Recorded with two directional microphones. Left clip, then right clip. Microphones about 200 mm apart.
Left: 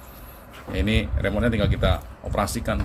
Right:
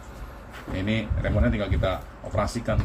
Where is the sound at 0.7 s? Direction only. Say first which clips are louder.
Left 4 dB; 50° left (ahead or behind).